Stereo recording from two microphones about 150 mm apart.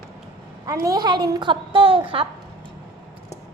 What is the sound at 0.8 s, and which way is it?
A woman's voice, 25° right (ahead or behind).